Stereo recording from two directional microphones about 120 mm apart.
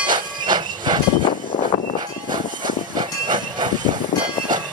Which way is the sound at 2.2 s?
40° right (ahead or behind).